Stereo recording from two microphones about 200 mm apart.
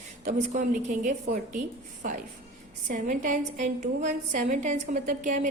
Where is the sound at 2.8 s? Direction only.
40° right (ahead or behind).